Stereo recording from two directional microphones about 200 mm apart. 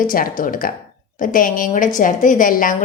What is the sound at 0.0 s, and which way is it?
A woman's voice, 45° left (ahead or behind).